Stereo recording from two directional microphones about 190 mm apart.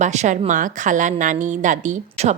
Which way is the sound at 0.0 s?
40° right (ahead or behind).